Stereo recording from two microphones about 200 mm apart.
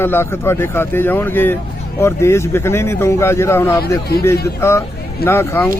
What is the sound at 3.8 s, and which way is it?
Speech, 50° left (ahead or behind).